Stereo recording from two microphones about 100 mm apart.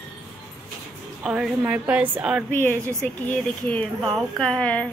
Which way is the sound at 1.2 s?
10° right (ahead or behind).